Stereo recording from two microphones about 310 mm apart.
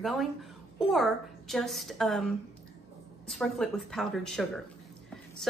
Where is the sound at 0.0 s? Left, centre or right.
Centre.